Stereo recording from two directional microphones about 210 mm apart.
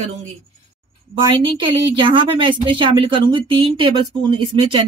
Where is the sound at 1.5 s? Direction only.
25° right (ahead or behind).